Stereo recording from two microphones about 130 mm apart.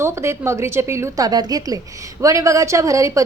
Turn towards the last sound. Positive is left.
turn(degrees=-25)  # may be behind; listen again after turning